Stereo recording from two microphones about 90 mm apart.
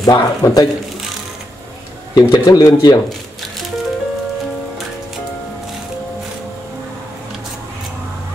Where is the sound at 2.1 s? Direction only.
45° left (ahead or behind).